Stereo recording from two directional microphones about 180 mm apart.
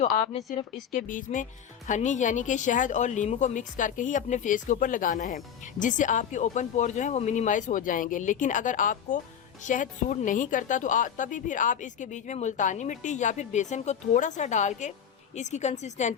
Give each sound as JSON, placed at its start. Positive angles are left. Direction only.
{"t": 0.9, "sound": "a woman's voice", "side_deg": 45}